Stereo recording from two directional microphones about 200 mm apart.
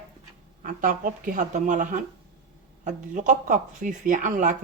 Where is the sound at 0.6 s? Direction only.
40° right (ahead or behind).